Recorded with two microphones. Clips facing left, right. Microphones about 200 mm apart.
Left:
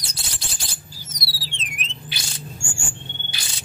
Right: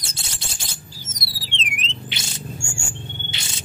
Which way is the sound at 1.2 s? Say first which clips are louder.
Right 3 dB; 70° right (ahead or behind).